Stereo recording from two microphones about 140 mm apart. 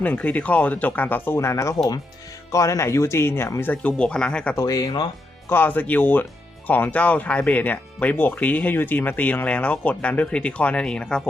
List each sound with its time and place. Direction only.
0.0 s speech: 10° left (ahead or behind)
4.5 s speech: 25° left (ahead or behind)
5.5 s speech: 15° left (ahead or behind)